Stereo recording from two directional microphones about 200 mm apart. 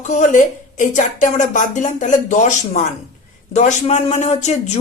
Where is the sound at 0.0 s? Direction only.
35° left (ahead or behind).